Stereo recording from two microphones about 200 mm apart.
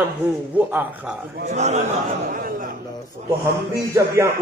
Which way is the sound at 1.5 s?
35° right (ahead or behind).